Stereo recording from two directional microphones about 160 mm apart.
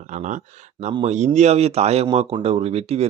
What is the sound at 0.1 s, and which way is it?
Speech, 50° right (ahead or behind).